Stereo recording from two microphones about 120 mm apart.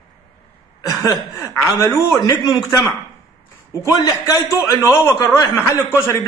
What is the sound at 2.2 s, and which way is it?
Speech, 30° left (ahead or behind).